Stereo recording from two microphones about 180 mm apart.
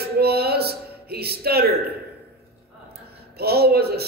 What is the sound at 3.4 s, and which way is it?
Speech, 60° right (ahead or behind).